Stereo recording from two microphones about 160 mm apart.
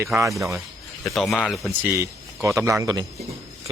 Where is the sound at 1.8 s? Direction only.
20° right (ahead or behind).